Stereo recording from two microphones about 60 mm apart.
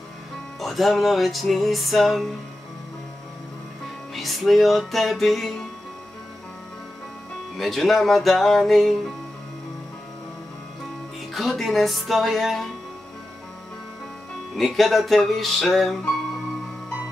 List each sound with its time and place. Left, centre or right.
0.6 s music: centre
4.1 s music: centre
7.5 s music: centre
11.3 s music: centre
14.5 s music: centre